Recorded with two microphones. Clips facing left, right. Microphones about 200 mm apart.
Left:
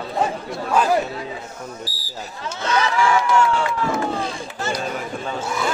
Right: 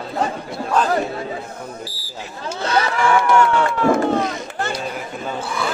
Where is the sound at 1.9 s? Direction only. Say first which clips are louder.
Right 1 dB; 30° right (ahead or behind).